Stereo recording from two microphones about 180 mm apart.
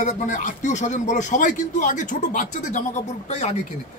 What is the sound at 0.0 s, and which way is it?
Speech, 45° left (ahead or behind).